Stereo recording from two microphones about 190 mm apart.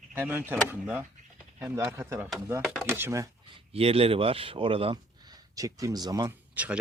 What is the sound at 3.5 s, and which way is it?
Speech, 30° right (ahead or behind).